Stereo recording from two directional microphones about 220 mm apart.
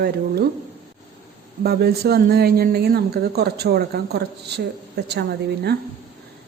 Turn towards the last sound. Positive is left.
turn(degrees=-45)  # may be behind; listen again after turning